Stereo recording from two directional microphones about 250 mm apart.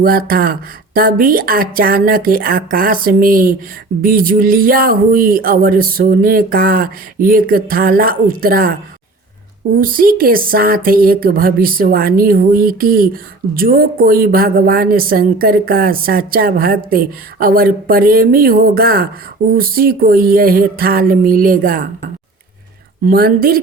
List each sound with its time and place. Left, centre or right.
0.0 s a woman's voice: right
23.0 s a woman's voice: right